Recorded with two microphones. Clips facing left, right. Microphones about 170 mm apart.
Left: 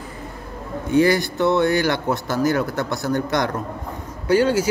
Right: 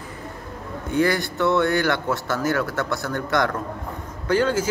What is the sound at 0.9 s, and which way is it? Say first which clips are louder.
A man's voice: left 4 dB; 20° left (ahead or behind).